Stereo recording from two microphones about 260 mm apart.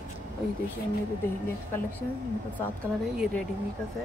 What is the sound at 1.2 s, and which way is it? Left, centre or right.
Speech, centre.